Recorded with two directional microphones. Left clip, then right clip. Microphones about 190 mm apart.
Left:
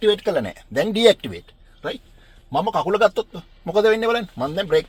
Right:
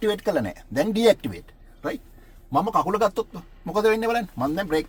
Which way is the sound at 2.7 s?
45° left (ahead or behind).